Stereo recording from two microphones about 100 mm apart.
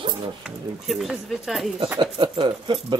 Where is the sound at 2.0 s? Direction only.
55° right (ahead or behind).